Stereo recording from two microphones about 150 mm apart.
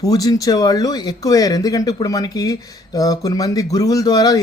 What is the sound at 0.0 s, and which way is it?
Speech, 25° left (ahead or behind).